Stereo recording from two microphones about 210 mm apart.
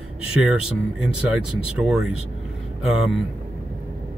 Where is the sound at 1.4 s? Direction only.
90° right.